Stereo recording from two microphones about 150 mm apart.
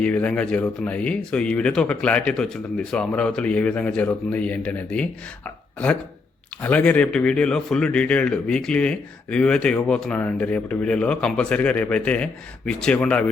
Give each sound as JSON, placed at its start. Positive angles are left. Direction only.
{"t": 0.0, "sound": "speech", "side_deg": 10}
{"t": 6.6, "sound": "speech", "side_deg": 10}